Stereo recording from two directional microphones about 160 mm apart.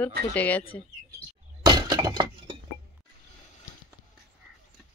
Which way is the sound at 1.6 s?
25° right (ahead or behind).